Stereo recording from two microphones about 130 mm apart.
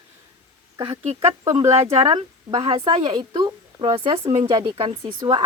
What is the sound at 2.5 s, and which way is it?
A woman's voice, 45° right (ahead or behind).